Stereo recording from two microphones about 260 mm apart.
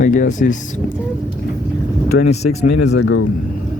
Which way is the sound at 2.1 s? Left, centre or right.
Left.